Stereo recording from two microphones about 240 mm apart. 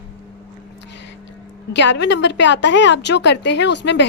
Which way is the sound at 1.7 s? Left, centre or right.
Left.